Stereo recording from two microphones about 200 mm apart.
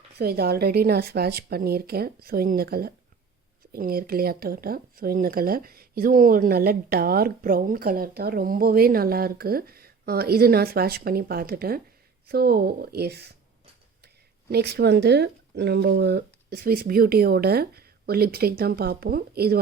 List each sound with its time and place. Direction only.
0.2 s speech: 50° right (ahead or behind)
14.5 s speech: 55° right (ahead or behind)